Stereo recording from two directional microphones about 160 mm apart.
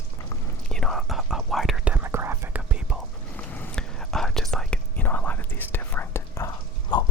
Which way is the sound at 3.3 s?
10° left (ahead or behind).